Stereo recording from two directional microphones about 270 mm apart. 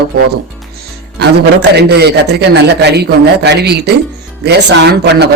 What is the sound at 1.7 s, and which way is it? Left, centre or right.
Speech, right.